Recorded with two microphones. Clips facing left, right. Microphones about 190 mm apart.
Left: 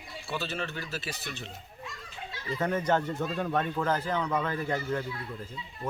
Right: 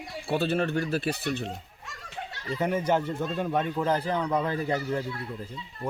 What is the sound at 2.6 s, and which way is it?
Speech, 10° right (ahead or behind).